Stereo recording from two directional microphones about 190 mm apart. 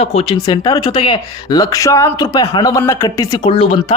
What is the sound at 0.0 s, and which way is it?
Speech, 30° left (ahead or behind).